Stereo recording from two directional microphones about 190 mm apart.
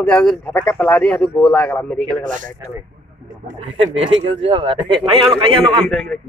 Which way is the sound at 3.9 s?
30° right (ahead or behind).